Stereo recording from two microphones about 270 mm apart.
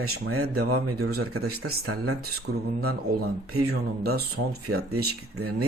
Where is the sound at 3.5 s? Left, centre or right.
Right.